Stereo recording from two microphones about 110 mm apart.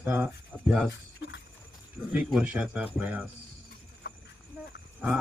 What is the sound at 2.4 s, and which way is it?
Speech, 10° right (ahead or behind).